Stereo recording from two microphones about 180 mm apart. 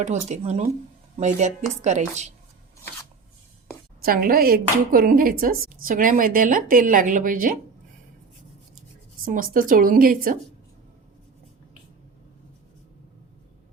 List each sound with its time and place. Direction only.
0.0 s speech: 40° right (ahead or behind)
4.0 s speech: 55° right (ahead or behind)
9.2 s speech: 50° right (ahead or behind)